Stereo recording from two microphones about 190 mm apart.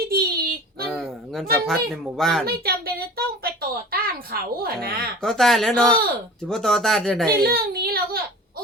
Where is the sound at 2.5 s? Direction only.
55° right (ahead or behind).